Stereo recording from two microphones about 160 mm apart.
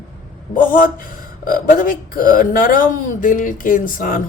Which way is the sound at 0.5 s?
60° left (ahead or behind).